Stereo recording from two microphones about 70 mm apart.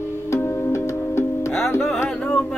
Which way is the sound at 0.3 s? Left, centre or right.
Left.